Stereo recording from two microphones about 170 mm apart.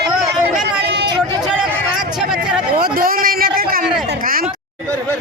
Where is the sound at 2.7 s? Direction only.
60° right (ahead or behind).